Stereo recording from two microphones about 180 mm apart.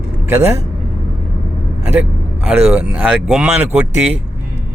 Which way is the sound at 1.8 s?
5° right (ahead or behind).